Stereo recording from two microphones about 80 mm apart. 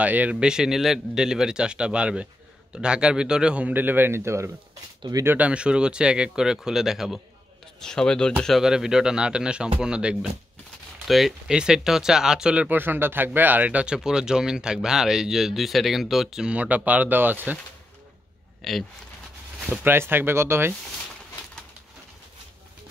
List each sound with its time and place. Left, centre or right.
0.0 s speech: centre
5.5 s speech: centre
7.8 s speech: centre
8.5 s speech: centre
12.6 s speech: right
18.6 s speech: centre
19.8 s speech: right